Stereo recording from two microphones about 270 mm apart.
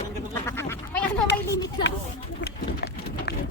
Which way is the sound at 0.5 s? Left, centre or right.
Centre.